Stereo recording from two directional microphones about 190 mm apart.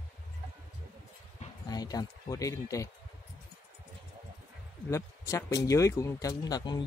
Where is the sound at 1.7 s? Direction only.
20° left (ahead or behind).